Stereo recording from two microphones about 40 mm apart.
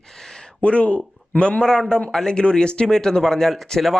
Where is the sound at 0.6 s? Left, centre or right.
Left.